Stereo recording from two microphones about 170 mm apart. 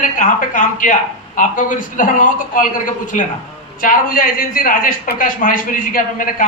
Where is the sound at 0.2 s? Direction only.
50° left (ahead or behind).